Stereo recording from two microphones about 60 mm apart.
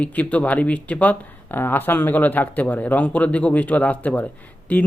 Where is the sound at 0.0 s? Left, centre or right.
Left.